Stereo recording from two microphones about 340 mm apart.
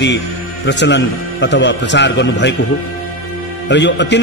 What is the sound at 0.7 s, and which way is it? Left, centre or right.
Speech, left.